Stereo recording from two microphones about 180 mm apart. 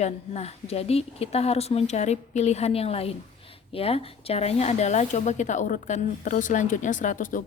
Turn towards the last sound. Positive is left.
turn(degrees=50)  # may be behind; listen again after turning